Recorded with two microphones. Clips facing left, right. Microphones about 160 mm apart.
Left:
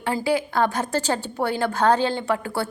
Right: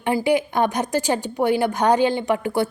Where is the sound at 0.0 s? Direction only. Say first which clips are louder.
Right 3 dB; 20° right (ahead or behind).